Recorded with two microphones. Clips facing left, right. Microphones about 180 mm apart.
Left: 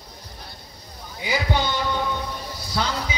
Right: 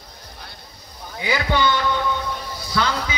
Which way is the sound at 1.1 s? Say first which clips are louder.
Right 2 dB; 70° right (ahead or behind).